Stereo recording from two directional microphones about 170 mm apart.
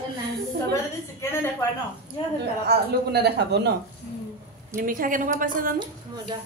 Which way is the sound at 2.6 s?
75° right (ahead or behind).